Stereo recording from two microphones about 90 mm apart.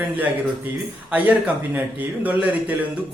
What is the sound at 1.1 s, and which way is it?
Speech, 15° right (ahead or behind).